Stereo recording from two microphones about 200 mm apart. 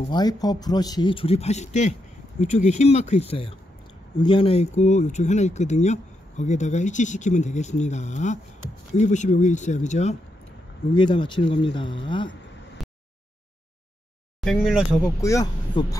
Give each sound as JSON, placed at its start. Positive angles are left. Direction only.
{"t": 0.1, "sound": "speech", "side_deg": 20}
{"t": 11.0, "sound": "speech", "side_deg": 25}
{"t": 14.4, "sound": "speech", "side_deg": 0}
{"t": 15.1, "sound": "speech", "side_deg": 15}